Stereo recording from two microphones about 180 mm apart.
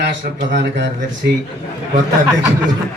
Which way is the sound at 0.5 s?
65° right (ahead or behind).